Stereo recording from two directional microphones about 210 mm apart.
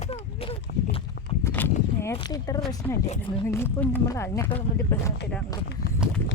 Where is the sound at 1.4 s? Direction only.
10° left (ahead or behind).